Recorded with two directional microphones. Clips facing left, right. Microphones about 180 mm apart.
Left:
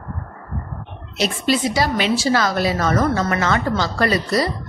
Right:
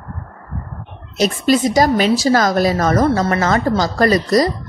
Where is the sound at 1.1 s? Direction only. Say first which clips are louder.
Right 5 dB; 45° right (ahead or behind).